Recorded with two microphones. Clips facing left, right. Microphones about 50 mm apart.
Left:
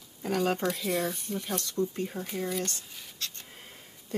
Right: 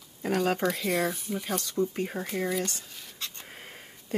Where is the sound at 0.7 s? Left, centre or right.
Centre.